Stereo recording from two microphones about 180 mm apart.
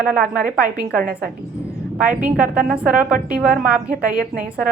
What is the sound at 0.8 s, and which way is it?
Speech, 55° right (ahead or behind).